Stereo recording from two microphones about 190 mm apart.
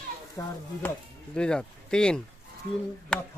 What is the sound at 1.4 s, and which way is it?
Speech, 5° left (ahead or behind).